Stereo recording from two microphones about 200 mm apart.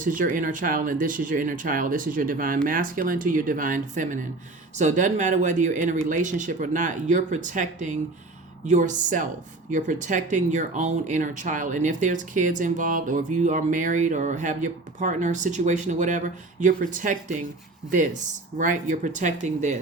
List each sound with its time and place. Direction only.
0.0 s speech: 40° right (ahead or behind)
18.5 s speech: 40° right (ahead or behind)